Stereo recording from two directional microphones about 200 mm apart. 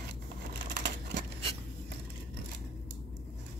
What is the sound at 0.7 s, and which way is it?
Crushing, 60° right (ahead or behind).